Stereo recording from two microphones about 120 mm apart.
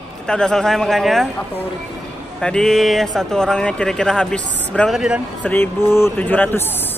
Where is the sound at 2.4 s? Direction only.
5° left (ahead or behind).